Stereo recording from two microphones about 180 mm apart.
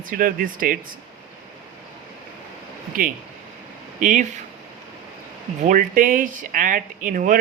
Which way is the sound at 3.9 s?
45° right (ahead or behind).